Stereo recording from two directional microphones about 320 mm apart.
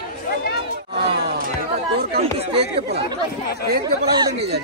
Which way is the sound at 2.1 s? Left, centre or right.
Centre.